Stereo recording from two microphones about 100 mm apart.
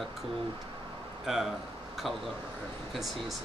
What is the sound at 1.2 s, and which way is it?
Speech, centre (ahead or behind).